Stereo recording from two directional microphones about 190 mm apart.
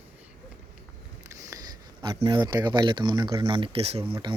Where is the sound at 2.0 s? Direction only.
25° right (ahead or behind).